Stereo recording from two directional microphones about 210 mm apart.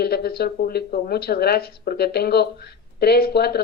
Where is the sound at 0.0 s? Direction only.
50° left (ahead or behind).